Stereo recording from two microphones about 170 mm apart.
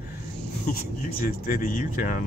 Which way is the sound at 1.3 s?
60° left (ahead or behind).